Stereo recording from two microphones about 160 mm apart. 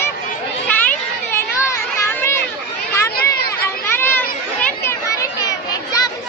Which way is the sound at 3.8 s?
10° left (ahead or behind).